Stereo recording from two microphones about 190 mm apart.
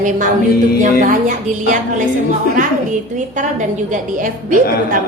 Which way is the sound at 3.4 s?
40° right (ahead or behind).